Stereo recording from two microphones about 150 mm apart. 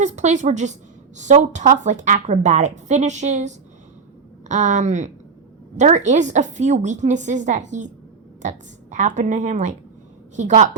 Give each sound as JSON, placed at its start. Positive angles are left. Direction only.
{"t": 0.0, "sound": "a woman's voice", "side_deg": -55}